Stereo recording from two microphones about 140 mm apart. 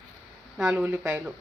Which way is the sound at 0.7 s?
15° right (ahead or behind).